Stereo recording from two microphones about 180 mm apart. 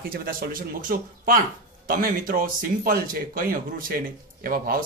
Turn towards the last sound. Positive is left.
turn(degrees=-55)  # may be behind; listen again after turning